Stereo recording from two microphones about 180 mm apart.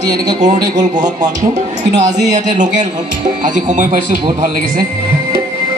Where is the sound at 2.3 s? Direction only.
40° right (ahead or behind).